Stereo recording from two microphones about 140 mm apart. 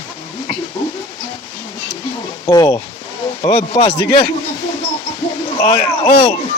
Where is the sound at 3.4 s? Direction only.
45° left (ahead or behind).